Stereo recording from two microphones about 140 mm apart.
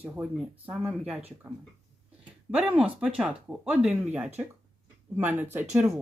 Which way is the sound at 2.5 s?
5° right (ahead or behind).